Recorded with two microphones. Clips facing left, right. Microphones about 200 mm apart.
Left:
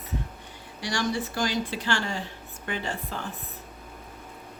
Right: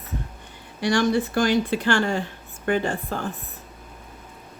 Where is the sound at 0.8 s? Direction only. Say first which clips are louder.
Right 8 dB; 55° right (ahead or behind).